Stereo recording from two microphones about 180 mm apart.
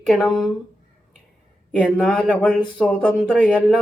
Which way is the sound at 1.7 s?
Centre (ahead or behind).